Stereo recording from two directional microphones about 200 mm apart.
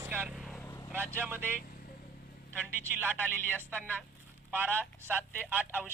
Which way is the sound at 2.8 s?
10° right (ahead or behind).